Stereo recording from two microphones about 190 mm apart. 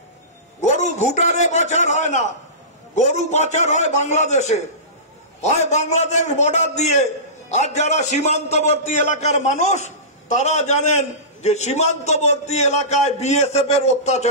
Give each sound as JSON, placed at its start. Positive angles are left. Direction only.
{"t": 0.6, "sound": "a man's voice", "side_deg": 40}